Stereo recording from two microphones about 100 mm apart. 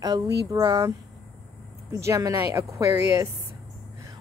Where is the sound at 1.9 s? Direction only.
30° right (ahead or behind).